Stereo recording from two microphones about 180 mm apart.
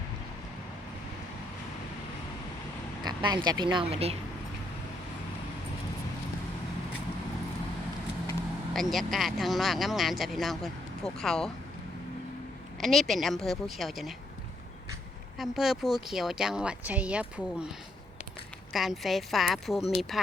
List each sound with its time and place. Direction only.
3.0 s speech: 25° right (ahead or behind)
8.7 s speech: centre (ahead or behind)
12.8 s speech: centre (ahead or behind)
15.4 s speech: centre (ahead or behind)
18.7 s speech: centre (ahead or behind)